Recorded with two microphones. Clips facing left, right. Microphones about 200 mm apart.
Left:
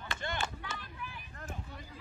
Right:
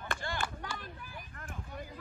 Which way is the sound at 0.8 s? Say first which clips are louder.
Even; 40° right (ahead or behind).